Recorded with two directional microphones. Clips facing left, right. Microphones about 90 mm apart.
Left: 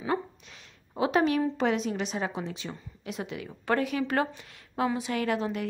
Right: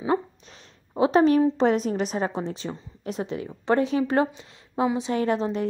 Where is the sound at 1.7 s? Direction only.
40° right (ahead or behind).